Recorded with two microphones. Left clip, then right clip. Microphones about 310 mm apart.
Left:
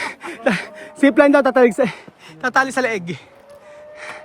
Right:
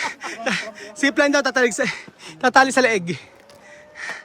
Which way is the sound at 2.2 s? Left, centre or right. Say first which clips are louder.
Right 3 dB; centre.